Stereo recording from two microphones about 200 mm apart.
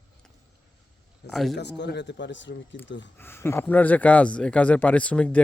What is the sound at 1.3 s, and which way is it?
Speech, centre (ahead or behind).